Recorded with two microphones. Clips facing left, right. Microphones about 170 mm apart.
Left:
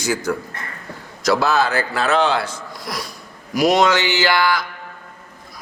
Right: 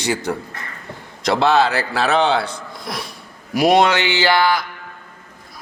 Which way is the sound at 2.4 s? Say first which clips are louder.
Right 1 dB; 60° right (ahead or behind).